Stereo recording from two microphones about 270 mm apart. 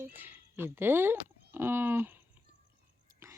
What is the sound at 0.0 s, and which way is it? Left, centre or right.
Speech, centre.